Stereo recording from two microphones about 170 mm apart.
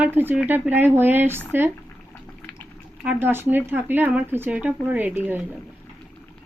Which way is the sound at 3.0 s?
10° right (ahead or behind).